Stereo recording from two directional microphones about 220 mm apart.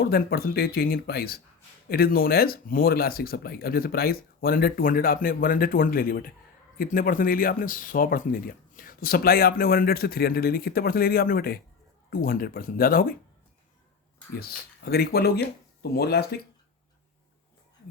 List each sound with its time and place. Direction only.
0.0 s speech: 45° left (ahead or behind)
14.3 s speech: 45° left (ahead or behind)